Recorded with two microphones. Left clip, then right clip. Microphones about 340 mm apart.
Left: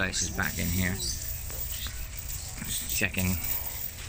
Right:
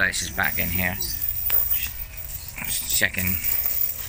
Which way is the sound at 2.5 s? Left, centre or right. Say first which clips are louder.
Right 6 dB; centre.